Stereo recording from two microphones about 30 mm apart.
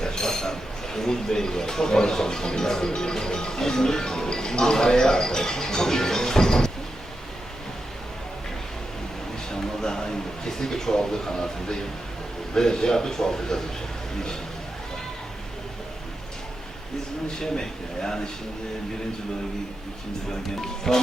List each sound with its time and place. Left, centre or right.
0.0 s chink: left
0.9 s speech: centre
9.5 s speech: left
17.4 s speech: left
20.6 s speech: centre